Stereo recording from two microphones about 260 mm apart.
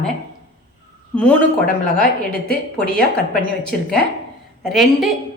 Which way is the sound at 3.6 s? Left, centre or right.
Centre.